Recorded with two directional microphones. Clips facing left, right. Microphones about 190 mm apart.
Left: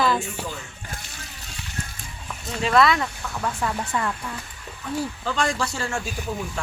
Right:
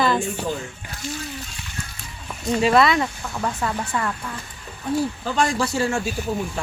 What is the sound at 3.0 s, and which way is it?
Speech, 10° right (ahead or behind).